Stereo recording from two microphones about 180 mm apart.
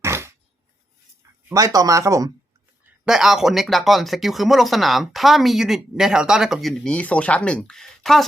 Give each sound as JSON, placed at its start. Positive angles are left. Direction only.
{"t": 0.0, "sound": "a sound", "side_deg": -15}
{"t": 1.5, "sound": "speech", "side_deg": -20}
{"t": 3.0, "sound": "speech", "side_deg": -5}